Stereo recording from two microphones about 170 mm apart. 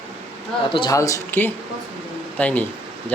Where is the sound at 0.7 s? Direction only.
30° left (ahead or behind).